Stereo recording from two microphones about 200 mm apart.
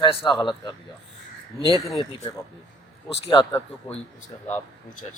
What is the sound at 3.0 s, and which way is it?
Speech, 25° left (ahead or behind).